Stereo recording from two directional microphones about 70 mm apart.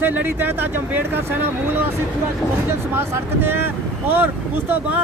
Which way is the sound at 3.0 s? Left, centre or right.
Right.